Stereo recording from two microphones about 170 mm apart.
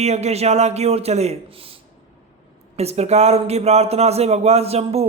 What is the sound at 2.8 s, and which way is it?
A man's voice, 40° right (ahead or behind).